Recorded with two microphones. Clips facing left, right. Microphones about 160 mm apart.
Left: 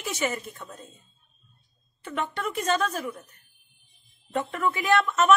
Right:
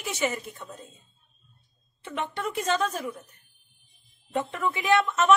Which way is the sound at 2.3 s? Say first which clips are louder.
Even; 15° right (ahead or behind).